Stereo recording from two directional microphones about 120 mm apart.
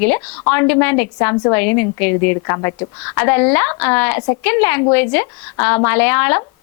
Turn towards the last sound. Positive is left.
turn(degrees=20)  # may be behind; listen again after turning